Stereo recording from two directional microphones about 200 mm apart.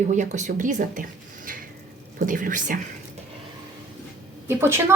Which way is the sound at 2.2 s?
40° right (ahead or behind).